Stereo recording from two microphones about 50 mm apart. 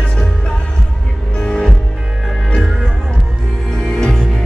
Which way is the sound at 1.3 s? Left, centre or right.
Left.